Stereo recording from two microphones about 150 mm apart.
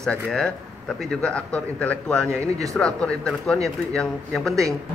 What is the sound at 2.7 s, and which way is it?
Speech, 5° left (ahead or behind).